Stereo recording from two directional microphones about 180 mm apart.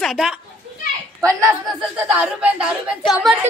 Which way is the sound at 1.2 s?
15° right (ahead or behind).